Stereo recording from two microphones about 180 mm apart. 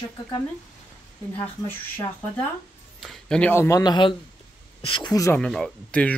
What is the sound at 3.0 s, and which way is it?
Speech, 5° left (ahead or behind).